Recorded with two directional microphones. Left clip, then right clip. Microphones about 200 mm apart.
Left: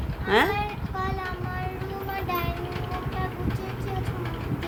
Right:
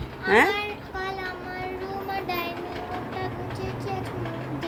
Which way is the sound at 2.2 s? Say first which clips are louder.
Left 3 dB; 15° left (ahead or behind).